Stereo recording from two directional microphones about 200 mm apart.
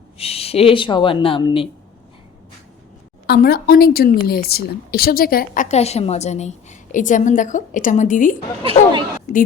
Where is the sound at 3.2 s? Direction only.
50° left (ahead or behind).